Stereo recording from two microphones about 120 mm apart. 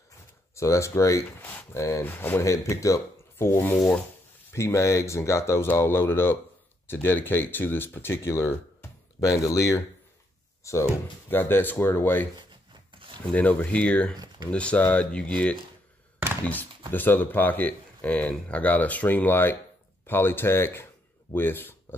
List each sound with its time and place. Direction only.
0.6 s speech: 25° left (ahead or behind)
13.3 s speech: 10° left (ahead or behind)